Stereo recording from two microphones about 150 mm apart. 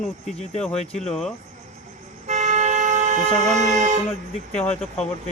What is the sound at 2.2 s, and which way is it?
Toot, 50° right (ahead or behind).